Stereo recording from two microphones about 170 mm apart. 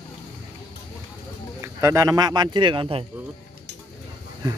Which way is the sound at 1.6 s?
15° right (ahead or behind).